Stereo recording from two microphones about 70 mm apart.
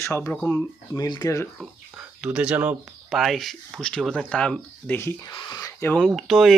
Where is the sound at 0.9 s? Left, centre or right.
Left.